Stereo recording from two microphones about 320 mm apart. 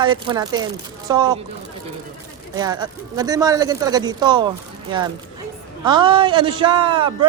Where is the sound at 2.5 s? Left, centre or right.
Centre.